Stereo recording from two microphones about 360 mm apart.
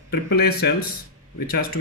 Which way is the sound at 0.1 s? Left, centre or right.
Left.